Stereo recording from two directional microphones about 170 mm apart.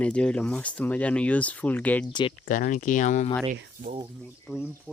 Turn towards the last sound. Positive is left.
turn(degrees=0)  # may be behind; listen again after turning